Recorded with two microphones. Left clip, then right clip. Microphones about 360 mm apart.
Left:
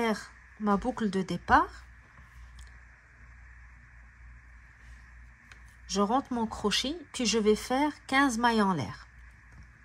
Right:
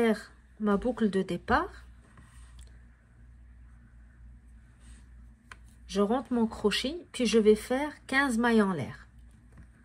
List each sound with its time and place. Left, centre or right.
0.7 s speech: centre
5.5 s a sound: centre
6.6 s speech: centre